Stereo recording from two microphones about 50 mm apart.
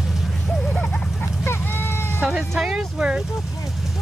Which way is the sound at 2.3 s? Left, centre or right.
Centre.